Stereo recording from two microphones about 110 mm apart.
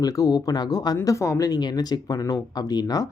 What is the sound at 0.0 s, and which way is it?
Speech, 35° left (ahead or behind).